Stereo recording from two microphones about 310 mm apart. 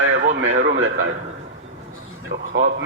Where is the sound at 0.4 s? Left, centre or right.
Right.